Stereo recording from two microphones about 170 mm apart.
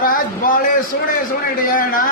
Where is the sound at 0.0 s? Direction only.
55° left (ahead or behind).